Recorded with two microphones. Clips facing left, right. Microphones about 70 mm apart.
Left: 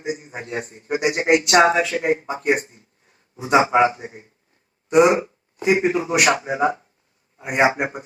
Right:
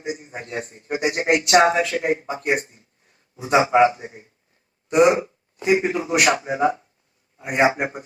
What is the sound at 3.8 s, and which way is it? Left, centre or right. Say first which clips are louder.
Speech: right 1 dB; left.